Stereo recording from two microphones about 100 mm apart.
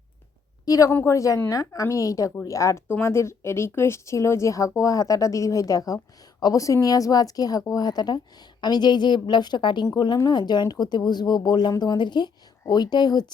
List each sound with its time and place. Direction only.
0.6 s a woman's voice: 35° left (ahead or behind)
0.9 s a woman's voice: 25° left (ahead or behind); by 13.2 s 45° left (ahead or behind)